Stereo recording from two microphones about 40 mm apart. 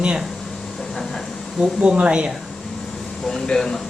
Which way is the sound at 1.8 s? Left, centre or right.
Right.